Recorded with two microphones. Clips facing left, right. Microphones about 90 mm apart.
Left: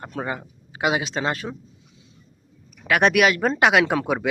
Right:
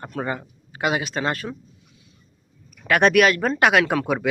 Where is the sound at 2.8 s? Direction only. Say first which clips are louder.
Right 1 dB; 10° left (ahead or behind).